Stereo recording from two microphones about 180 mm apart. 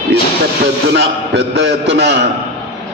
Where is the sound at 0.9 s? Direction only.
70° right (ahead or behind).